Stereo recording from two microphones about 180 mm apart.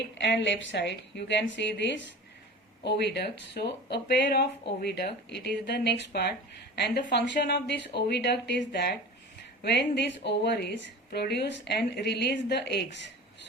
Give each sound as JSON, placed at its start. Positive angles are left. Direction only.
{"t": 0.2, "sound": "a woman's voice", "side_deg": 75}
{"t": 2.8, "sound": "a woman's voice", "side_deg": 70}